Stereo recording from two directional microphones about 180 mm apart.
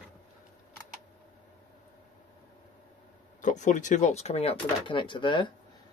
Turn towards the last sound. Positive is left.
turn(degrees=25)  # may be behind; listen again after turning